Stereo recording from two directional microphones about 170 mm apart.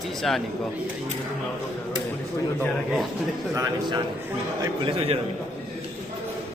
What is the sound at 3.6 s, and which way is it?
A man's voice, 25° right (ahead or behind).